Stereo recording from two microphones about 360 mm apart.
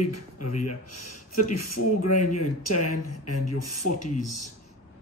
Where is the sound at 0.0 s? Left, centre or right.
Left.